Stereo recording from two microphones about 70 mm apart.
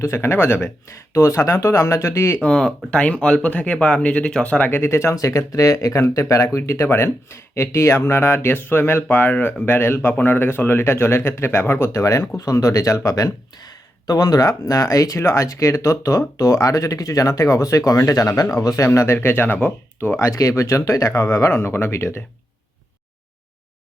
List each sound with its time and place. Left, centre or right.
0.0 s speech: left
0.9 s speech: left
2.4 s speech: centre
4.7 s speech: left
5.1 s speech: left
11.9 s speech: left
20.2 s speech: left